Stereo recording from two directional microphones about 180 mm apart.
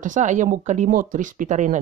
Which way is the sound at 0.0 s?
45° right (ahead or behind).